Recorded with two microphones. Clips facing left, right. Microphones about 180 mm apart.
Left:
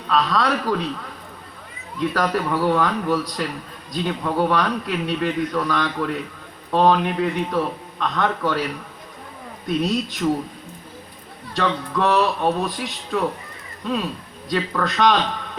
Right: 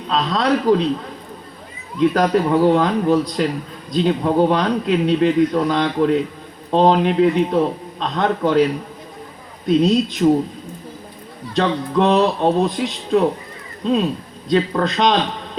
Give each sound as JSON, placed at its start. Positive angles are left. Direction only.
{"t": 0.1, "sound": "speech", "side_deg": -20}
{"t": 2.0, "sound": "speech", "side_deg": -20}
{"t": 11.5, "sound": "speech", "side_deg": -20}